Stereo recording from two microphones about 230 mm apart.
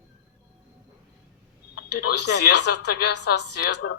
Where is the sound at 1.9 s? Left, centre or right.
Left.